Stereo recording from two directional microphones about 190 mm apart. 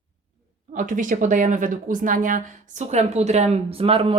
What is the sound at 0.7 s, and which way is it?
A woman's voice, 45° right (ahead or behind).